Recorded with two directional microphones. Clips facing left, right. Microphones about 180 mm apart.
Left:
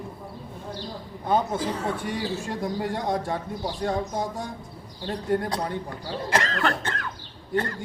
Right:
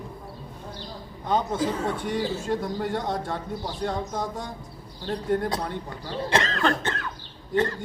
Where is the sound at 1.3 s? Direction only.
10° left (ahead or behind).